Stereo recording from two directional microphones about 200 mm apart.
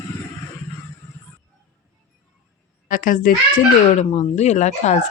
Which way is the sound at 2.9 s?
40° left (ahead or behind).